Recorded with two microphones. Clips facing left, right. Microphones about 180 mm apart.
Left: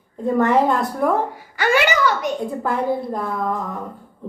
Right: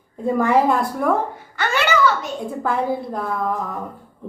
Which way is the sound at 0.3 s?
5° right (ahead or behind).